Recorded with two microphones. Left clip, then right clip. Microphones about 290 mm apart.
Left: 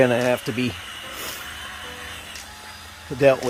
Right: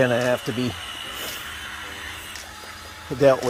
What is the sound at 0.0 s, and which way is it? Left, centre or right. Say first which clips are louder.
Speech: left 2 dB; centre.